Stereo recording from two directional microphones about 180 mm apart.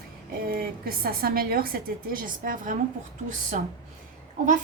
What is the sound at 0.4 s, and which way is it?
A woman's voice, 55° right (ahead or behind).